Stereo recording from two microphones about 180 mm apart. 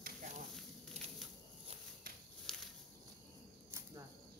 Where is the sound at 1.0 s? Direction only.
35° right (ahead or behind).